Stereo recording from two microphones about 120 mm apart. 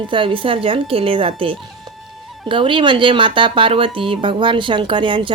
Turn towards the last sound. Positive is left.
turn(degrees=-45)  # may be behind; listen again after turning